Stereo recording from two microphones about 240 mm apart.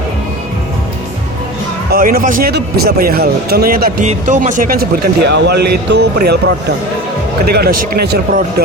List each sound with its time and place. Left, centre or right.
1.9 s a man's voice: right